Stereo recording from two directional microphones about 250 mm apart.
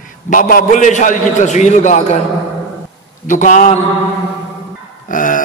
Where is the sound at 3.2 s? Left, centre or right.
Left.